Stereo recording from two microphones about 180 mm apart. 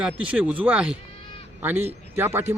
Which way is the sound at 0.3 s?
5° right (ahead or behind).